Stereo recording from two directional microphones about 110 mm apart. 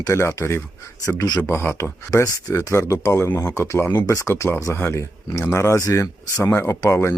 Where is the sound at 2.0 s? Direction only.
35° left (ahead or behind).